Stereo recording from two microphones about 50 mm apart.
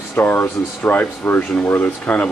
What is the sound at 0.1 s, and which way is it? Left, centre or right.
Speech, left.